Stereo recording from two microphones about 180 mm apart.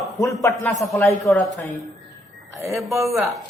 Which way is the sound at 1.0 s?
15° left (ahead or behind).